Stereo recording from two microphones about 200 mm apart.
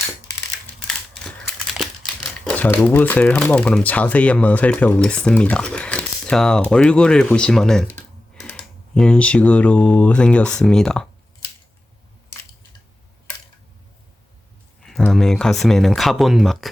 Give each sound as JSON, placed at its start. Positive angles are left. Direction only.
{"t": 1.8, "sound": "speech", "side_deg": 5}
{"t": 14.8, "sound": "speech", "side_deg": 0}